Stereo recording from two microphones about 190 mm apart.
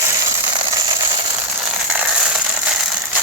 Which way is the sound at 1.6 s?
10° right (ahead or behind).